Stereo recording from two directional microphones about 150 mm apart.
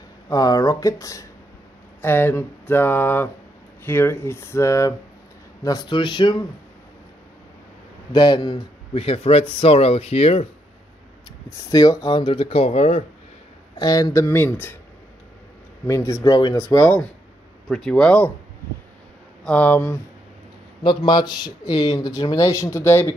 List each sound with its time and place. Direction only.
0.3 s speech: 25° left (ahead or behind)
2.0 s a sound: 15° left (ahead or behind)
5.6 s speech: 25° left (ahead or behind)
8.1 s speech: 30° left (ahead or behind)
11.7 s speech: 25° left (ahead or behind); by 13.0 s 45° left (ahead or behind)
13.7 s speech: 25° left (ahead or behind)
15.9 s speech: 20° left (ahead or behind)
17.6 s speech: centre (ahead or behind)
19.4 s a sound: 10° left (ahead or behind)
20.8 s speech: 35° left (ahead or behind); by 23.1 s 15° left (ahead or behind)